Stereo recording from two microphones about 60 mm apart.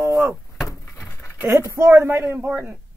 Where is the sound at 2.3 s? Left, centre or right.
Right.